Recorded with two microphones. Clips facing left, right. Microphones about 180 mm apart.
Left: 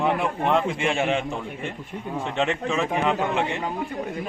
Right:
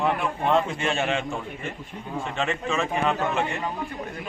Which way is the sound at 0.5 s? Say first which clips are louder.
Right 1 dB; 15° left (ahead or behind).